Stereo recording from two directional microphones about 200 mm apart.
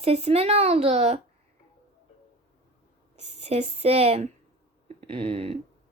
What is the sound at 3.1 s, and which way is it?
Speech, 35° right (ahead or behind).